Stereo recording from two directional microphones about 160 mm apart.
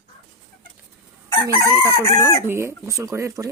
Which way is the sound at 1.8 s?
20° left (ahead or behind).